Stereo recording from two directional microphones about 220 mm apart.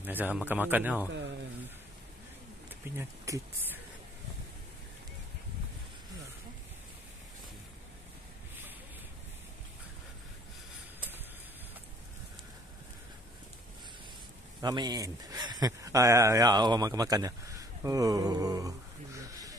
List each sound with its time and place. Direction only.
0.0 s speech: 10° right (ahead or behind)
3.0 s speech: 10° right (ahead or behind)
14.6 s speech: 20° right (ahead or behind)